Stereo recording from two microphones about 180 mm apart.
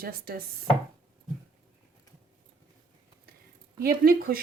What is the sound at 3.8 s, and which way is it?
Speech, 55° right (ahead or behind).